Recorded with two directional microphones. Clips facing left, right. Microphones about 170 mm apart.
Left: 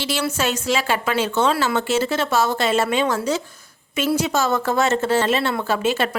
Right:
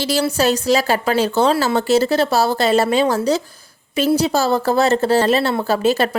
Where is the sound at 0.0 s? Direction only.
35° right (ahead or behind).